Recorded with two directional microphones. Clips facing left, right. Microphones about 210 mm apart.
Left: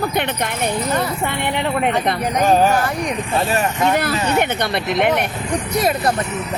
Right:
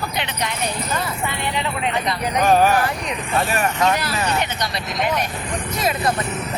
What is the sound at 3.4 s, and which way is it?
Speech, 25° left (ahead or behind).